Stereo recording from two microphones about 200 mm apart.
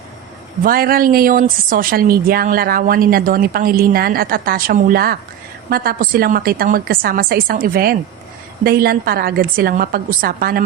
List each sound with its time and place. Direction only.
0.6 s a woman's voice: 45° right (ahead or behind)